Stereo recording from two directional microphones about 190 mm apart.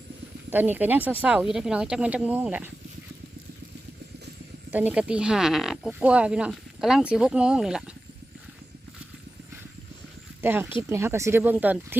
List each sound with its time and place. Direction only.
0.5 s speech: 10° right (ahead or behind)
4.7 s speech: 10° right (ahead or behind)
10.4 s speech: 10° right (ahead or behind)